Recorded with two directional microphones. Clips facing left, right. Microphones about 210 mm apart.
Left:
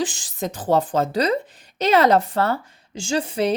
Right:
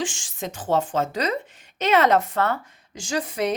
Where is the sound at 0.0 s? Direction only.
35° left (ahead or behind).